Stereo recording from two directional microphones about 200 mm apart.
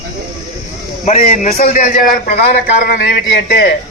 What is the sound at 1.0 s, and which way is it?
A man's voice, 40° left (ahead or behind).